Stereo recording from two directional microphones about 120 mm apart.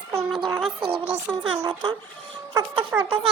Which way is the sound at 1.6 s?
40° right (ahead or behind).